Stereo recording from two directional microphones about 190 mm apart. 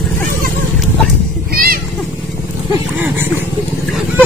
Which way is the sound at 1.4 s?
50° right (ahead or behind).